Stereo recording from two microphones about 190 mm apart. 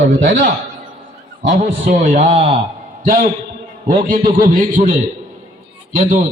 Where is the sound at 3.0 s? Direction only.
45° right (ahead or behind).